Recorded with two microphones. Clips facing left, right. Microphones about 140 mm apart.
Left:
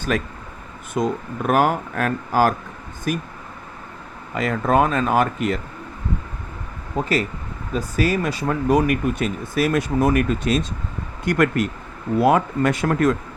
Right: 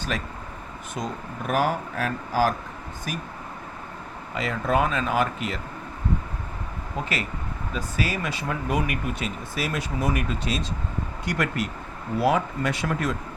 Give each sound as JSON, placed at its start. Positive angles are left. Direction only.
{"t": 0.1, "sound": "speech", "side_deg": 55}
{"t": 4.4, "sound": "speech", "side_deg": 50}
{"t": 6.9, "sound": "speech", "side_deg": 40}